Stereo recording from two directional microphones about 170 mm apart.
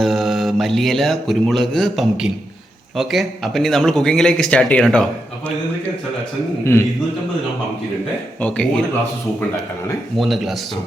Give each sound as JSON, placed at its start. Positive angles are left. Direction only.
{"t": 0.0, "sound": "mantra", "side_deg": 0}
{"t": 8.4, "sound": "speech", "side_deg": 5}
{"t": 10.2, "sound": "mantra", "side_deg": 0}